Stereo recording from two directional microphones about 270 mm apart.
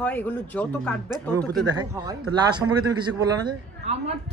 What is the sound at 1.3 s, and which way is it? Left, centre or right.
A man's voice, centre.